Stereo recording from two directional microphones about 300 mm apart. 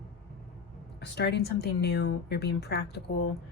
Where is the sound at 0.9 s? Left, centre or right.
Left.